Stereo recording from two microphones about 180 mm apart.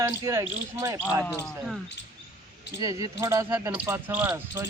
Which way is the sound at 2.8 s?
20° right (ahead or behind).